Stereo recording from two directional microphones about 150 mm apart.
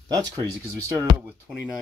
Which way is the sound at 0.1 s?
25° right (ahead or behind).